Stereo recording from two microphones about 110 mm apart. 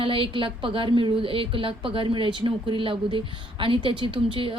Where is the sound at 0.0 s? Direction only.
50° right (ahead or behind).